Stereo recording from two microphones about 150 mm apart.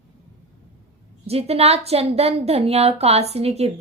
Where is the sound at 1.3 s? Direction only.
45° right (ahead or behind).